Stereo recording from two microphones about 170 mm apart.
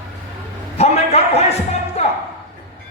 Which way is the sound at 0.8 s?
40° left (ahead or behind).